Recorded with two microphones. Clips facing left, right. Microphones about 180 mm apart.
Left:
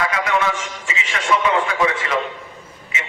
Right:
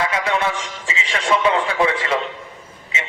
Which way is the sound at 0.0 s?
30° right (ahead or behind).